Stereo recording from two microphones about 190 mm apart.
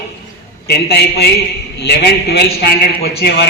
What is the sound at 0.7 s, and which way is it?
A man's voice, 60° left (ahead or behind).